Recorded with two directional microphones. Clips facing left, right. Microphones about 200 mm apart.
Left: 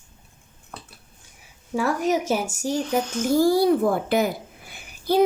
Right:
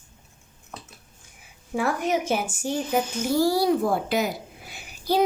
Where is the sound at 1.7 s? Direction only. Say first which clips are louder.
Left 2 dB; 40° left (ahead or behind).